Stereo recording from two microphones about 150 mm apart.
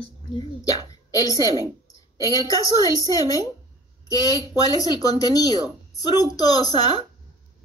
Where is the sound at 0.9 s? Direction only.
25° left (ahead or behind).